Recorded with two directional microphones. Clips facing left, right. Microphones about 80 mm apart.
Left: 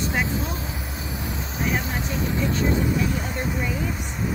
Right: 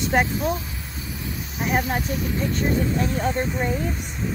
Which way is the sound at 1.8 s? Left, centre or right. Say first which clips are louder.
Right 4 dB; right.